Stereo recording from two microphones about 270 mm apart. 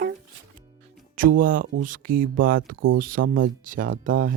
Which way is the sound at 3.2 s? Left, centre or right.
Right.